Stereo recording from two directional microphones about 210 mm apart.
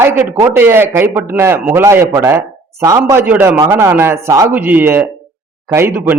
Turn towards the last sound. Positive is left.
turn(degrees=-10)  # may be behind; listen again after turning